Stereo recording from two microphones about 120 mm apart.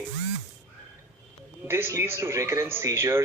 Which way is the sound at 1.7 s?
20° right (ahead or behind).